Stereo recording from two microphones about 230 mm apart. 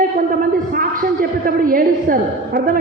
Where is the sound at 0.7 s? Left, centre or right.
Right.